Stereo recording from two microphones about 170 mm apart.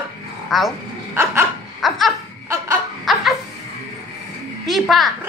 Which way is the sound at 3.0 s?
Centre (ahead or behind).